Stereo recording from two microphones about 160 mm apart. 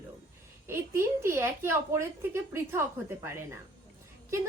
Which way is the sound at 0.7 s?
15° right (ahead or behind).